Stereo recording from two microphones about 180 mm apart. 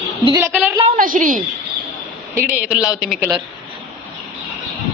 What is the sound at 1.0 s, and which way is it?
Speech, 50° right (ahead or behind).